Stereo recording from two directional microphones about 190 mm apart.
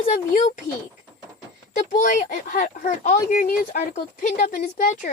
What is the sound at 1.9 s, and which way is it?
Speech, 45° left (ahead or behind).